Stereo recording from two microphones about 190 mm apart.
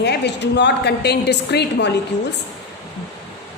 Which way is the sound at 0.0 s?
65° left (ahead or behind).